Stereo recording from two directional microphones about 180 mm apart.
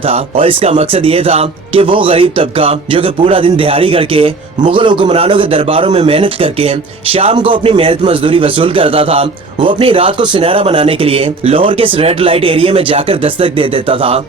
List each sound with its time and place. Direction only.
0.0 s a man's voice: 30° right (ahead or behind)